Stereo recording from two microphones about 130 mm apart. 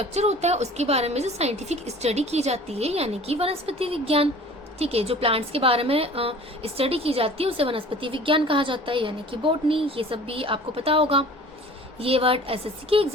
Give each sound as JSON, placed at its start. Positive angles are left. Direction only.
{"t": 0.0, "sound": "a woman's voice", "side_deg": -55}